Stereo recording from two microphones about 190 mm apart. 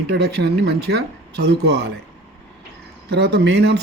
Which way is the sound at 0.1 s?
60° right (ahead or behind).